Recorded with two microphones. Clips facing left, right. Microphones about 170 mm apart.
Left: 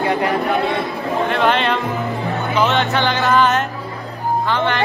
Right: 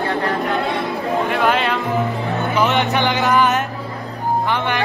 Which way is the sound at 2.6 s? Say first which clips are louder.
Even; 15° right (ahead or behind).